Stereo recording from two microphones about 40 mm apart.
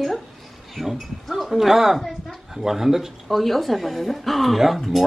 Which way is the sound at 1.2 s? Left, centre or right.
Centre.